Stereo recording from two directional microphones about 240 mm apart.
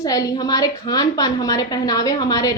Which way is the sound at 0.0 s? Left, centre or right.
Centre.